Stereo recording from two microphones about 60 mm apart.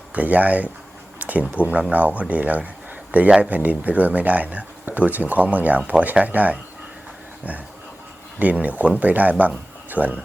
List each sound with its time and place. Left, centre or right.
0.1 s speech: right
8.4 s speech: right